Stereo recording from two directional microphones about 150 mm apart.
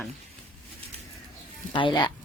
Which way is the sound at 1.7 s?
30° left (ahead or behind).